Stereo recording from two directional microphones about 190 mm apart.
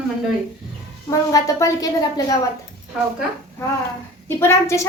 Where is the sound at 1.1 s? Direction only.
20° left (ahead or behind).